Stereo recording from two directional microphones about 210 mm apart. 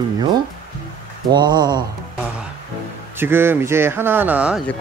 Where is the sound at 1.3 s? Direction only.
20° right (ahead or behind).